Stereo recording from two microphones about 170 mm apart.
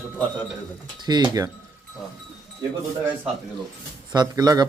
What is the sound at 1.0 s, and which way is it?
Speech, 25° right (ahead or behind).